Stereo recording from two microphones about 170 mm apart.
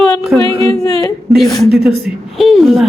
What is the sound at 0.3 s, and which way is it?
Speech, 5° right (ahead or behind).